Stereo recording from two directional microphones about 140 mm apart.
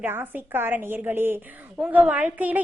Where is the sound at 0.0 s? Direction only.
15° right (ahead or behind).